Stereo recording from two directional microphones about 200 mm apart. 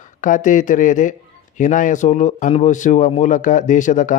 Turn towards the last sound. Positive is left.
turn(degrees=40)  # may be behind; listen again after turning